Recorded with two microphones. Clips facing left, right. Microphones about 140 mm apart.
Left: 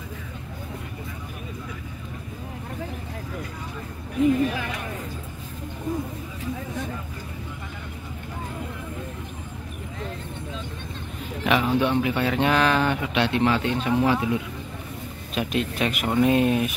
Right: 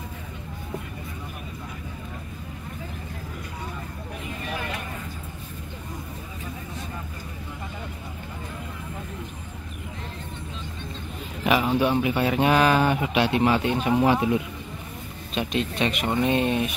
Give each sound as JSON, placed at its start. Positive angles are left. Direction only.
{"t": 11.4, "sound": "speech", "side_deg": -5}
{"t": 15.4, "sound": "speech", "side_deg": 5}